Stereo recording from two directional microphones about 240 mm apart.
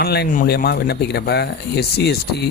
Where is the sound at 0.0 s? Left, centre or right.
Left.